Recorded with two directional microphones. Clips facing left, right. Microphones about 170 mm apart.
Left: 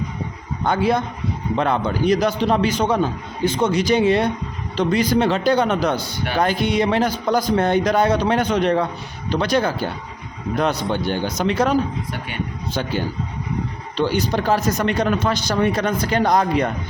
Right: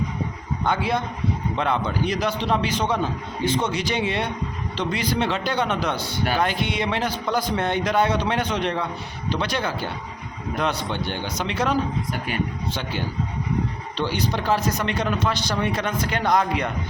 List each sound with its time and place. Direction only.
0.6 s a man's voice: 40° left (ahead or behind)
13.9 s speech: 45° left (ahead or behind)